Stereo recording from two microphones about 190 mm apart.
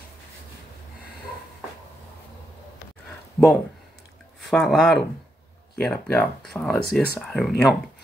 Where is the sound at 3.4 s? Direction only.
5° left (ahead or behind).